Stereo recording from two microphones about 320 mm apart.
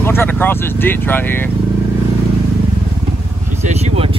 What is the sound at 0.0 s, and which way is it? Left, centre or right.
Speech, centre.